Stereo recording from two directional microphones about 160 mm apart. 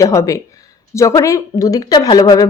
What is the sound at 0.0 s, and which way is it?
A woman's voice, 20° left (ahead or behind).